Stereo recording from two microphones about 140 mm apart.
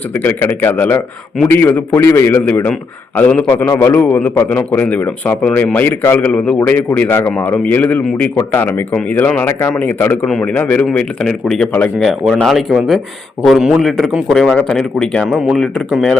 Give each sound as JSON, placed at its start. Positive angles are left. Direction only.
{"t": 0.1, "sound": "speech", "side_deg": 15}